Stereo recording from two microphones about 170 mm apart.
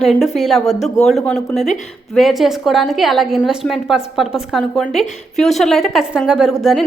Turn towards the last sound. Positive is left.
turn(degrees=-5)  # may be behind; listen again after turning